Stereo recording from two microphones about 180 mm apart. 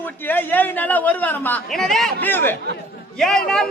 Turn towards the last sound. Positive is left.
turn(degrees=5)  # may be behind; listen again after turning